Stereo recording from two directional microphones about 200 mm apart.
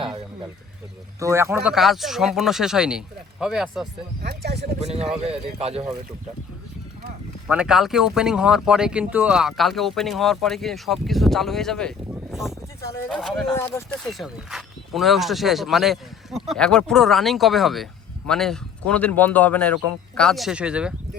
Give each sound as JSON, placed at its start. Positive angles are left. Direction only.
{"t": 1.2, "sound": "speech", "side_deg": -15}
{"t": 1.5, "sound": "speech", "side_deg": 0}
{"t": 4.2, "sound": "speech", "side_deg": -55}
{"t": 4.9, "sound": "speech", "side_deg": -30}
{"t": 7.4, "sound": "speech", "side_deg": -5}
{"t": 13.5, "sound": "speech", "side_deg": 15}
{"t": 14.1, "sound": "speech", "side_deg": 0}